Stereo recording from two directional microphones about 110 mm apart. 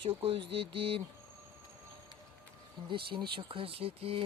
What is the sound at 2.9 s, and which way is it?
Speech, 50° right (ahead or behind).